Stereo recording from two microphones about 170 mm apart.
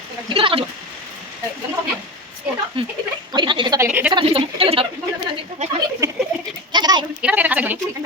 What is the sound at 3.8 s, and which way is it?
Speech, 10° right (ahead or behind).